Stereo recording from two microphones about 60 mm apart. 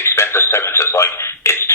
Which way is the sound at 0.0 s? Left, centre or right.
Left.